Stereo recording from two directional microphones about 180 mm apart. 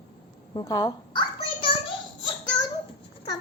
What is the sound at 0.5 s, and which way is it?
Speech, 20° left (ahead or behind).